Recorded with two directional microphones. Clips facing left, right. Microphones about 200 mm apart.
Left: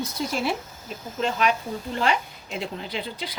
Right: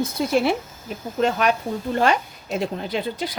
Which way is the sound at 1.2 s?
50° right (ahead or behind).